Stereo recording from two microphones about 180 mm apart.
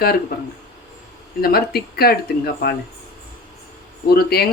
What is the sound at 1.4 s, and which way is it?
Speech, 60° left (ahead or behind).